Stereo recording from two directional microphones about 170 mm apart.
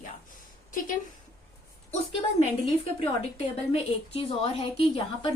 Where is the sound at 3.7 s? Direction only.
35° left (ahead or behind).